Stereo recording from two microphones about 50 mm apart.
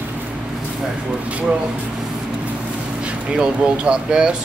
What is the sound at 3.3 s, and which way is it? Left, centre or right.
Speech, right.